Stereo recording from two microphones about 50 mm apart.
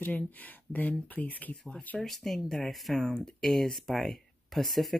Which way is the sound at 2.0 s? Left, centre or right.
Centre.